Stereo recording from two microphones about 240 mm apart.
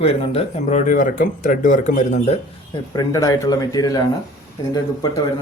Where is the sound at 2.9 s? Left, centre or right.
Centre.